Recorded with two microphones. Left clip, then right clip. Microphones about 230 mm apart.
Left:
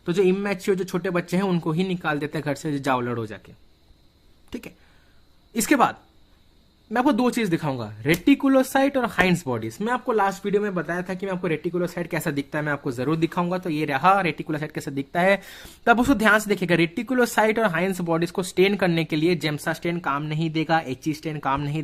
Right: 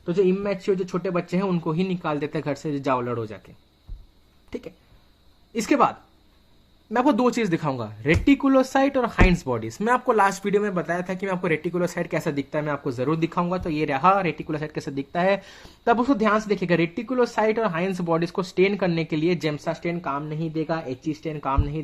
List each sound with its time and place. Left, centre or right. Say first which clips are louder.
0.0 s speech: even; left
4.4 s a sound: right 2 dB; left
5.5 s speech: even; left